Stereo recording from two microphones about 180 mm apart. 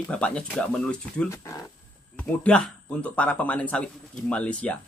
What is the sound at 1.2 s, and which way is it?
Speech, 15° left (ahead or behind).